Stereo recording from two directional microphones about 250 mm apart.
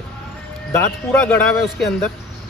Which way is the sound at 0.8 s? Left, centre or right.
Centre.